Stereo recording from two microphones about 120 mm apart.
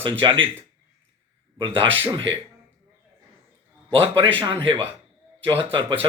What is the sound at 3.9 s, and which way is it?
Speech, 45° right (ahead or behind).